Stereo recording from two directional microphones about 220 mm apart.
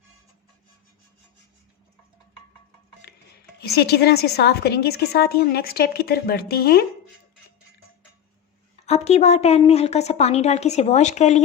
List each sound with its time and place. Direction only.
3.6 s a woman's voice: 45° left (ahead or behind)
8.9 s a woman's voice: 30° left (ahead or behind)